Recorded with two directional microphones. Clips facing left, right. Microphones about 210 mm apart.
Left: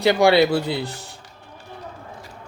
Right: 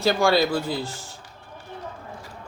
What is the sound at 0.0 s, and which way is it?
Speech, 65° left (ahead or behind).